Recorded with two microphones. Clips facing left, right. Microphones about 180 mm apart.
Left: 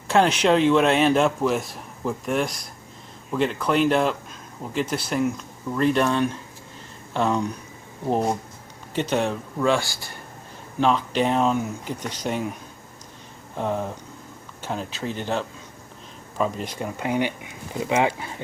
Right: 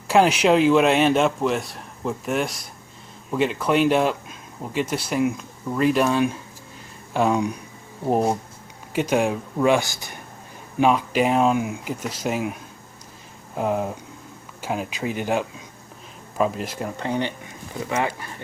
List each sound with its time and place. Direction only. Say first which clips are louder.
0.1 s a man's voice: right 2 dB; 5° right (ahead or behind)
13.6 s a man's voice: right 3 dB; 5° right (ahead or behind)
17.0 s speech: left 2 dB; 10° left (ahead or behind)